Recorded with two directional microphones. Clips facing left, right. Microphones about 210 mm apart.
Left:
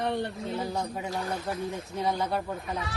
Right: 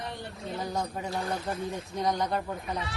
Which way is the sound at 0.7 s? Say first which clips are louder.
Even; 5° left (ahead or behind).